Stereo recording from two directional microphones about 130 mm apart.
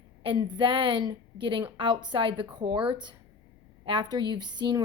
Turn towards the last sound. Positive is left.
turn(degrees=-35)  # may be behind; listen again after turning